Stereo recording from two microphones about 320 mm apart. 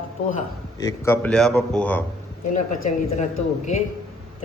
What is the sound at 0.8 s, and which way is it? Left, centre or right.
A man's voice, centre.